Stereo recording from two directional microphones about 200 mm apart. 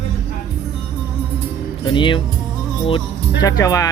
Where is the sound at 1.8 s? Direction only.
25° left (ahead or behind).